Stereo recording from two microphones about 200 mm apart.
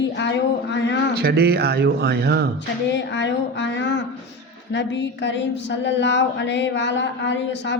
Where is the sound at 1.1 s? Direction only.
55° right (ahead or behind).